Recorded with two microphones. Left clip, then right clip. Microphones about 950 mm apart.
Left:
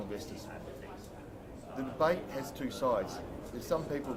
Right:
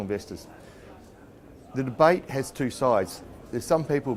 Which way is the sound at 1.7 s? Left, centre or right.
Right.